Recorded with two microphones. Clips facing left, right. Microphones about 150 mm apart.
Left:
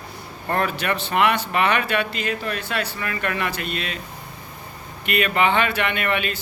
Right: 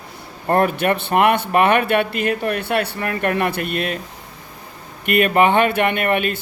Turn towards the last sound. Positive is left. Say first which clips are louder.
# right 5 dB
turn(degrees=-50)  # may be behind; listen again after turning